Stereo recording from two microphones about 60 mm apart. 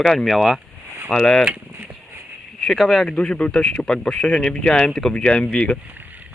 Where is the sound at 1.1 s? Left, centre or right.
Centre.